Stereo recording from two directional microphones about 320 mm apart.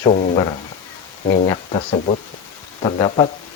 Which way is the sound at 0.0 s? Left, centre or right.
Left.